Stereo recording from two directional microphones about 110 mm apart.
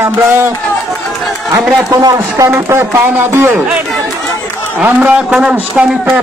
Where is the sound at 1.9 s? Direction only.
35° right (ahead or behind).